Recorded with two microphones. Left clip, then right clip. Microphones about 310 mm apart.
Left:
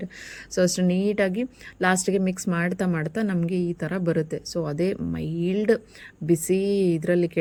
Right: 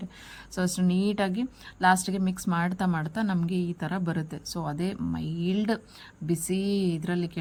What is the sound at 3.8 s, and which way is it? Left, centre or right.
Speech, centre.